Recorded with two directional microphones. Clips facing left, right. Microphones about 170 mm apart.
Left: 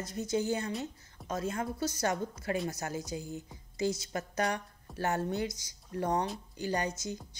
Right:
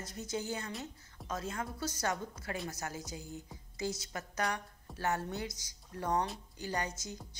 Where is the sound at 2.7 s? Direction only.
20° left (ahead or behind).